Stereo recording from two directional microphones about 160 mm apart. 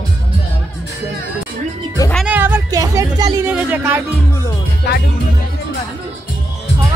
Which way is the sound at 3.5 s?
10° right (ahead or behind).